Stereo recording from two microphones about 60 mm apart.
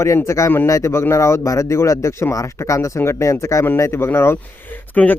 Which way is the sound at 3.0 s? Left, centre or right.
Left.